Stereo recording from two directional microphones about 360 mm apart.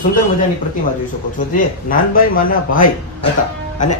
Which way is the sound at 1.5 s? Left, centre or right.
Left.